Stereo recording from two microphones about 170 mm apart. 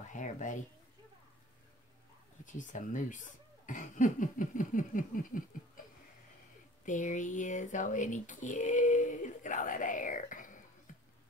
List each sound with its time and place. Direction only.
0.1 s speech: 45° left (ahead or behind)
2.4 s speech: 45° left (ahead or behind)
6.8 s speech: 50° left (ahead or behind)